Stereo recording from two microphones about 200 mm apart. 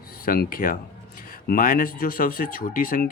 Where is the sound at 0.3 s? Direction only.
45° left (ahead or behind).